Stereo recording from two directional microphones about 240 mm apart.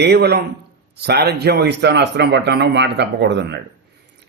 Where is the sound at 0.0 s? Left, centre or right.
Right.